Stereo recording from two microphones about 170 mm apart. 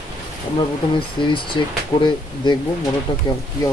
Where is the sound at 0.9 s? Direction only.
30° left (ahead or behind).